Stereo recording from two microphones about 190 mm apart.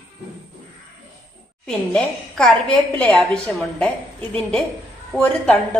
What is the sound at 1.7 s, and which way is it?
A woman's voice, 5° left (ahead or behind).